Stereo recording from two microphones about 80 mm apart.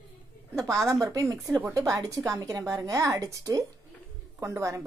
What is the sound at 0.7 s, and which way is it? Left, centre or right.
A woman's voice, right.